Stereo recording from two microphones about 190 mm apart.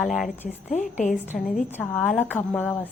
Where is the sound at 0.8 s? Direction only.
40° left (ahead or behind).